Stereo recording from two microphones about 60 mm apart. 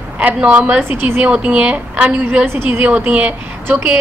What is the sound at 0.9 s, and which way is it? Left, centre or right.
Speech, right.